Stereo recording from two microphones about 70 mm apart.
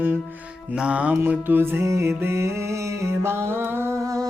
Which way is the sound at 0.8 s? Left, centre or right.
Centre.